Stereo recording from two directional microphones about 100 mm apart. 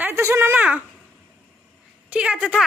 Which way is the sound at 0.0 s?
25° right (ahead or behind).